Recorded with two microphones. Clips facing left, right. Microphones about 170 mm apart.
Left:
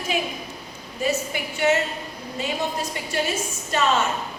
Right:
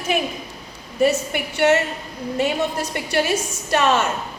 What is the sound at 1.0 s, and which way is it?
Speech, 75° right (ahead or behind).